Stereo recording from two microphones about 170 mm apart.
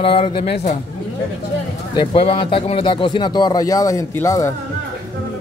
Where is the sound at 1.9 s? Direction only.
35° left (ahead or behind); by 4.5 s 15° left (ahead or behind).